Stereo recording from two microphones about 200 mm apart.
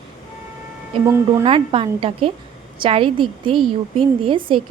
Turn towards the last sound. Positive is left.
turn(degrees=-25)  # may be behind; listen again after turning